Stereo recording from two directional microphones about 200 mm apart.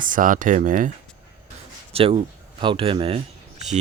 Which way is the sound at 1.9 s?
30° right (ahead or behind).